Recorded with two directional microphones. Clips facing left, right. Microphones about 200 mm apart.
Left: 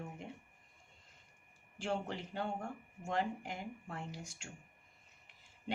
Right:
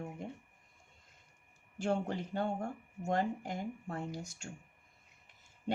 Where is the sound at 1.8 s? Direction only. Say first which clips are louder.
Right 5 dB; 45° right (ahead or behind).